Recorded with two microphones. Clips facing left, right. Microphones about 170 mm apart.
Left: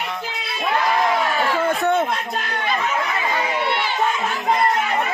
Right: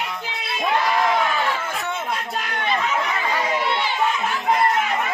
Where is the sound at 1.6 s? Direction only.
60° left (ahead or behind).